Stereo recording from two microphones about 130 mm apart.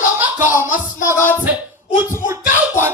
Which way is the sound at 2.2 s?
20° right (ahead or behind).